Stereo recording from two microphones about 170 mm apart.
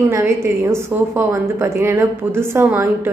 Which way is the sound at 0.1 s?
15° right (ahead or behind).